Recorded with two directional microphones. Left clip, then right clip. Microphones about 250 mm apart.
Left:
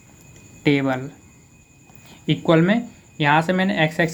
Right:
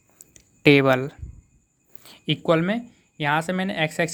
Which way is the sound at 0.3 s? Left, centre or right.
Right.